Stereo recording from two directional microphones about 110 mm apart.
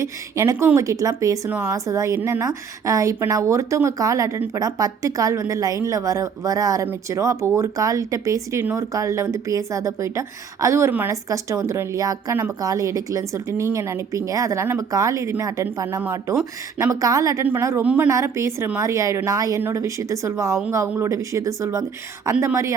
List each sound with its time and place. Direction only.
0.0 s a woman's voice: 30° right (ahead or behind)
16.0 s a woman's voice: 20° right (ahead or behind)
17.8 s a woman's voice: 10° right (ahead or behind)
18.1 s a woman's voice: 30° right (ahead or behind)